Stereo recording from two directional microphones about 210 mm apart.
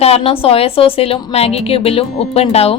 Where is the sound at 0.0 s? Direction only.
25° left (ahead or behind).